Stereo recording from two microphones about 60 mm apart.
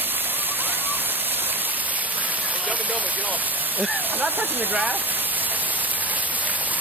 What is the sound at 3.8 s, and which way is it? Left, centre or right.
Speech, centre.